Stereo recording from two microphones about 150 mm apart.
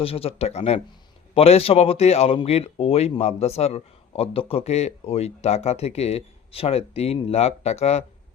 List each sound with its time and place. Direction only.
0.0 s speech: 40° left (ahead or behind)